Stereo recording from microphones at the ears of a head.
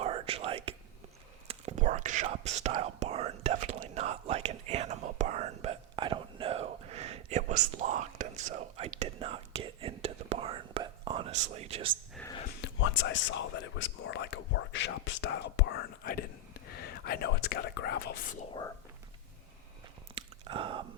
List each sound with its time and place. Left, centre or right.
0.0 s whispering: right
12.4 s a sound: left
20.1 s chewing: right